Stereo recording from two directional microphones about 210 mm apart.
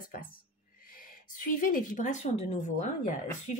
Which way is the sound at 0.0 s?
40° left (ahead or behind).